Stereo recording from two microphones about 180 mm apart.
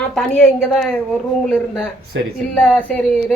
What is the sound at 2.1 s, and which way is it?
Speech, 90° right.